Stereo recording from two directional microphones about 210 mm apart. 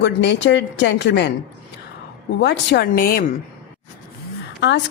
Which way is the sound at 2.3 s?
55° left (ahead or behind).